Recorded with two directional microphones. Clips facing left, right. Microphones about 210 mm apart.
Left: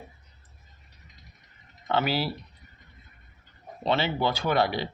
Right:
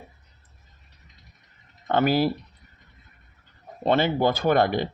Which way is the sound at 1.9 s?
50° right (ahead or behind).